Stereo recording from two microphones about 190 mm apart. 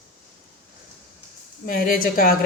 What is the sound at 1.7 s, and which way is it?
Speech, 50° left (ahead or behind).